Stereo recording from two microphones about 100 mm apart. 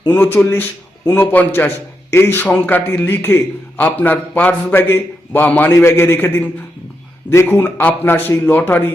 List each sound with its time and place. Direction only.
0.1 s a man's voice: 20° left (ahead or behind)